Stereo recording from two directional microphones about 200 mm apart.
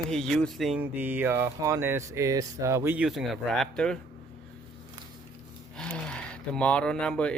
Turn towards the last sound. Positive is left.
turn(degrees=5)  # may be behind; listen again after turning